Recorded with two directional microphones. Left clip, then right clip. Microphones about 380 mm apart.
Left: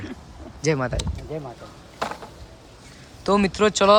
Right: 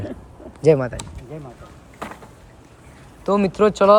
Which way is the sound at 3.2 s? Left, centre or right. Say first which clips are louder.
Right 2 dB; centre.